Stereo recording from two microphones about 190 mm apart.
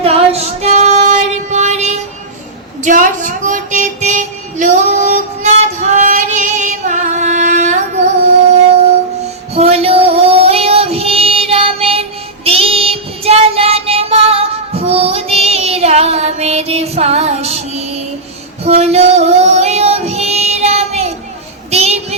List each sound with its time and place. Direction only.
0.0 s female singing: 30° right (ahead or behind)
2.8 s a sound: 45° right (ahead or behind)
9.2 s child singing: 35° right (ahead or behind)
18.6 s female singing: 35° right (ahead or behind)
21.7 s child singing: 35° right (ahead or behind)